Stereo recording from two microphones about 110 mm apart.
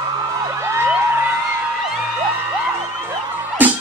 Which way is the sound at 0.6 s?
20° right (ahead or behind).